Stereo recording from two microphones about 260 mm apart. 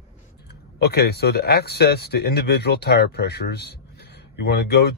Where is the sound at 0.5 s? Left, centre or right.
Left.